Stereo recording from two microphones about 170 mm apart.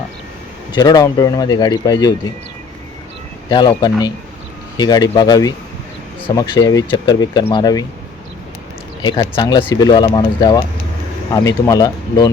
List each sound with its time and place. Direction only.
0.7 s speech: 25° left (ahead or behind)
3.5 s speech: 25° left (ahead or behind)
9.0 s speech: 25° left (ahead or behind)